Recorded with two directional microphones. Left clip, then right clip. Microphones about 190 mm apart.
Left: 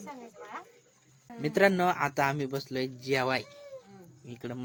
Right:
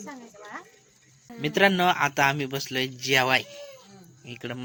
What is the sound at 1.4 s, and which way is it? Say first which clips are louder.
A man's voice: right 4 dB; 5° left (ahead or behind).